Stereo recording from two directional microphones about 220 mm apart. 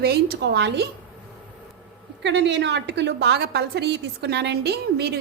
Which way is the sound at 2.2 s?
50° right (ahead or behind).